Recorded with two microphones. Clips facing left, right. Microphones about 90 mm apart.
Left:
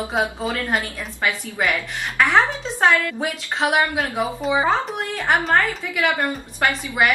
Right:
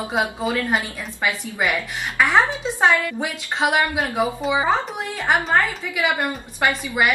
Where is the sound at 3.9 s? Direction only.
5° right (ahead or behind).